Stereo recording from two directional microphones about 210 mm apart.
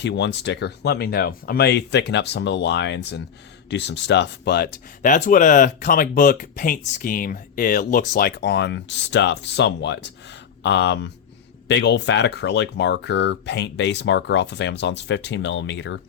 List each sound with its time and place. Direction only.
0.0 s speech: 55° left (ahead or behind)